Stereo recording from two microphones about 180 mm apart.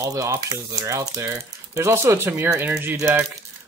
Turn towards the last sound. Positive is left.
turn(degrees=-10)  # may be behind; listen again after turning